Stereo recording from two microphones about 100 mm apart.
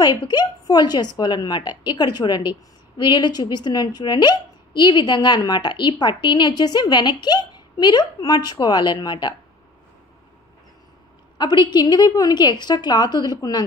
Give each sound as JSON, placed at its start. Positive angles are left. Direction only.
{"t": 0.0, "sound": "speech", "side_deg": 45}
{"t": 11.3, "sound": "speech", "side_deg": 50}